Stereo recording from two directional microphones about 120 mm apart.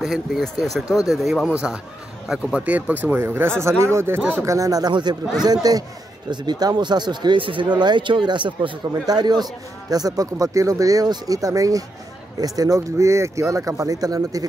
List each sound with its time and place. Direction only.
0.0 s speech: centre (ahead or behind)
4.5 s a man's voice: 30° right (ahead or behind)